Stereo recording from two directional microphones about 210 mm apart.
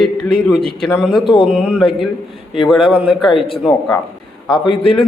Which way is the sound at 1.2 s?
25° left (ahead or behind).